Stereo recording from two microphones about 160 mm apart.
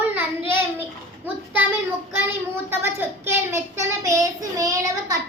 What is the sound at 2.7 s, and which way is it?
A child's voice, 15° right (ahead or behind).